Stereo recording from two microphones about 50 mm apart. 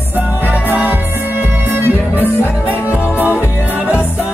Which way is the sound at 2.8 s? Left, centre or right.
Right.